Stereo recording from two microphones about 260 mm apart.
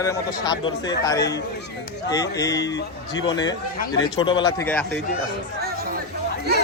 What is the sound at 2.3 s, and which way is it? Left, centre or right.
Speech, centre.